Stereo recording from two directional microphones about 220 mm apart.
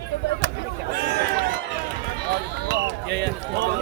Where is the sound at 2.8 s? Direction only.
50° right (ahead or behind).